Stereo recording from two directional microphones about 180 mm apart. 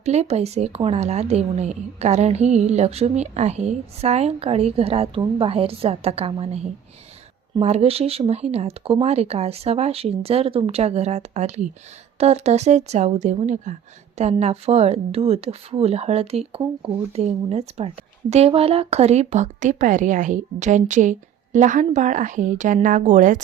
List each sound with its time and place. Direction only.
0.0 s speech: 35° right (ahead or behind)